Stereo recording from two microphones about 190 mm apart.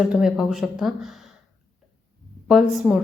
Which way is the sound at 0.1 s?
5° right (ahead or behind).